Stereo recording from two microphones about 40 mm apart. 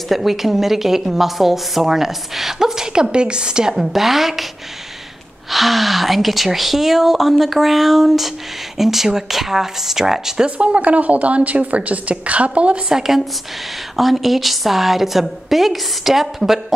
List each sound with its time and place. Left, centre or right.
0.1 s a woman's voice: centre
3.8 s speech: centre
5.5 s a woman's voice: centre
10.4 s a woman's voice: right
12.9 s a woman's voice: centre